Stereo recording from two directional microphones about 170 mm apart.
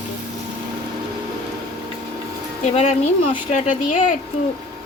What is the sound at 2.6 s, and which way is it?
A woman's voice, 40° left (ahead or behind).